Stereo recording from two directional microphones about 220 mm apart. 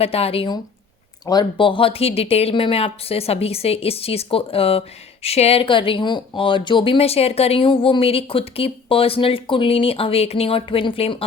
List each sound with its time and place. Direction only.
0.0 s speech: 25° left (ahead or behind)